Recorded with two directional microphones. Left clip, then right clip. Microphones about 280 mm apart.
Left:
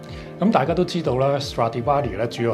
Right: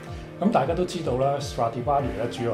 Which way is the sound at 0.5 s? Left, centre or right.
Left.